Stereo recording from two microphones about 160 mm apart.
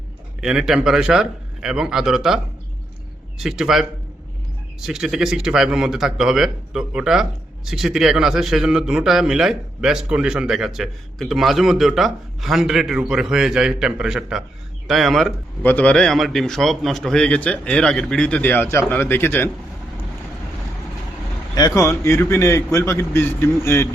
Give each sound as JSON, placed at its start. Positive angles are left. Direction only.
{"t": 0.4, "sound": "speech", "side_deg": -5}
{"t": 15.6, "sound": "a man's voice", "side_deg": 10}
{"t": 21.5, "sound": "a man's voice", "side_deg": 20}